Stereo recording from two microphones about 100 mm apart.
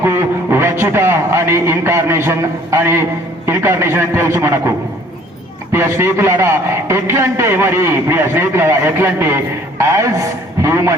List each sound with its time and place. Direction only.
0.0 s a man's voice: 25° right (ahead or behind)
5.7 s a man's voice: 25° right (ahead or behind)